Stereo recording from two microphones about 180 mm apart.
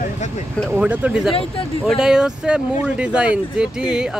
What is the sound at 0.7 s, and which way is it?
Speech, 10° right (ahead or behind).